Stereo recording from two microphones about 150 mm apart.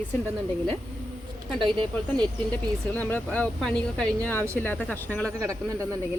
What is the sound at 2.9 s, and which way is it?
Speech, 10° left (ahead or behind).